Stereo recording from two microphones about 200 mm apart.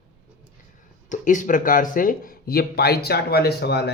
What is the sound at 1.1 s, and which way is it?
Speech, 40° left (ahead or behind).